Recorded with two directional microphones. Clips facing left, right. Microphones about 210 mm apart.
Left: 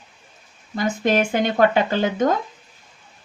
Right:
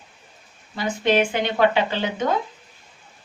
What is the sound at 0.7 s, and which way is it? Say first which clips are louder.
A woman's voice: left 1 dB; 45° left (ahead or behind).